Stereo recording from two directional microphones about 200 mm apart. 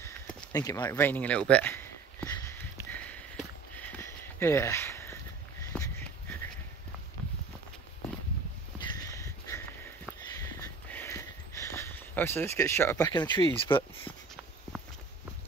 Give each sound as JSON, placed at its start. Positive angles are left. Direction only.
{"t": 0.5, "sound": "a sound", "side_deg": 20}
{"t": 8.8, "sound": "sniff", "side_deg": 20}
{"t": 13.1, "sound": "speech", "side_deg": 20}